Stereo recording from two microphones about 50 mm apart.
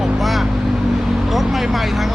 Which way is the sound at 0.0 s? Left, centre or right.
Centre.